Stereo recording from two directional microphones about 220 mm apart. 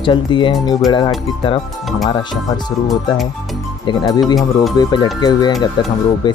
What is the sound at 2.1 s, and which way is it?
Speech, 20° left (ahead or behind).